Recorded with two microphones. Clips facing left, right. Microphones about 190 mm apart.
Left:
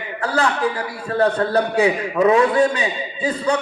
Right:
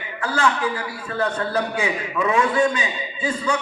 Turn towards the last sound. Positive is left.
turn(degrees=35)  # may be behind; listen again after turning